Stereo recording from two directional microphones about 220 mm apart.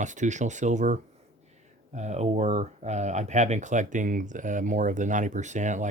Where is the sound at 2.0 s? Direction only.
30° right (ahead or behind).